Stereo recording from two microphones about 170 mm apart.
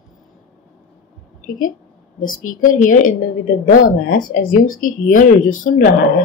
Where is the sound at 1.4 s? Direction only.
50° left (ahead or behind).